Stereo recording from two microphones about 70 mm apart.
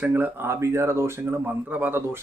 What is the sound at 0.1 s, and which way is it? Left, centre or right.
Speech, right.